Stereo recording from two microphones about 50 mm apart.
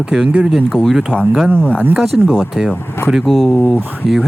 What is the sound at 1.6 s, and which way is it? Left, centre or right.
Speech, left.